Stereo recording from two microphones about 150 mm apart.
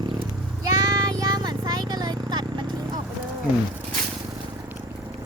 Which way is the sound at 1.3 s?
30° right (ahead or behind).